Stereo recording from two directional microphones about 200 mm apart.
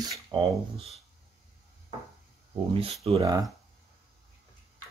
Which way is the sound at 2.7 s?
30° right (ahead or behind).